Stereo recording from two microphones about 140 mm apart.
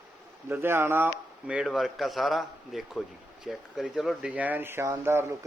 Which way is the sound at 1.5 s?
5° right (ahead or behind).